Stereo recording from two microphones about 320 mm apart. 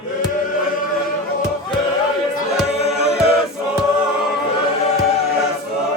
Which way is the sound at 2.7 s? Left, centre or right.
Centre.